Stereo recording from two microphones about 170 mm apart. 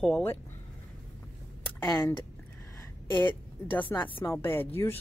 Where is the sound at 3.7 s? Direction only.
10° left (ahead or behind).